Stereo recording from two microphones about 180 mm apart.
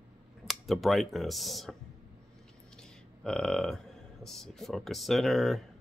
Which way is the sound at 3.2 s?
5° left (ahead or behind).